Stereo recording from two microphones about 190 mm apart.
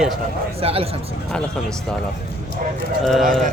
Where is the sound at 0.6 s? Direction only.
30° right (ahead or behind).